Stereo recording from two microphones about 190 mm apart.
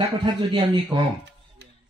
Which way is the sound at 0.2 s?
25° right (ahead or behind).